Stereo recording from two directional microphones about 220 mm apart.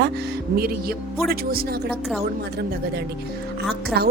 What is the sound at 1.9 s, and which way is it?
Speech, centre (ahead or behind).